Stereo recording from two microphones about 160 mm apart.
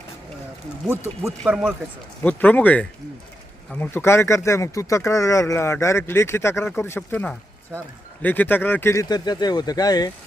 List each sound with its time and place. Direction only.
2.2 s speech: 10° left (ahead or behind); by 10.1 s 25° left (ahead or behind)